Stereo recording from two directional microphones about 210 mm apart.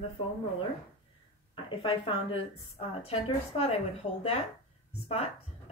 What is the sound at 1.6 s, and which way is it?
A woman's voice, 25° left (ahead or behind).